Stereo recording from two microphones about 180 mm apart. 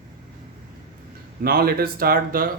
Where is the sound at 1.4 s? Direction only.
55° right (ahead or behind).